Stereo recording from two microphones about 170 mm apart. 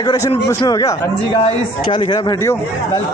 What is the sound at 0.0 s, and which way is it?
Speech, 20° left (ahead or behind).